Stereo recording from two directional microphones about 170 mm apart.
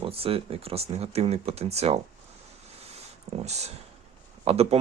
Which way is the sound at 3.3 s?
40° right (ahead or behind).